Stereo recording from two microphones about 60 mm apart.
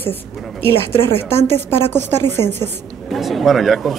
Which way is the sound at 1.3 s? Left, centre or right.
Left.